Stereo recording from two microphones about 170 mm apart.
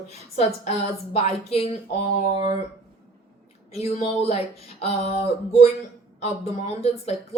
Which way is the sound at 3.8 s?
40° left (ahead or behind).